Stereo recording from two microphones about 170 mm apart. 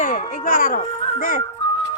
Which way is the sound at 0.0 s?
50° left (ahead or behind).